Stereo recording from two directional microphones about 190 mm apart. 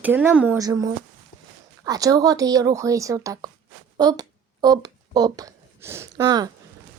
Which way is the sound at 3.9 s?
20° right (ahead or behind).